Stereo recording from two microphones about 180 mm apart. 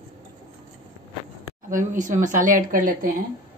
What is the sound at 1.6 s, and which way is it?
Speech, 45° right (ahead or behind).